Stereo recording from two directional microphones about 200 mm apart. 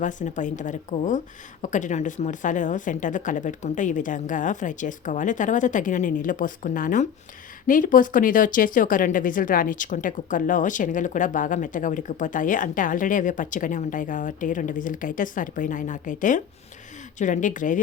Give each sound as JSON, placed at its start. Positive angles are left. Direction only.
{"t": 0.0, "sound": "speech", "side_deg": 40}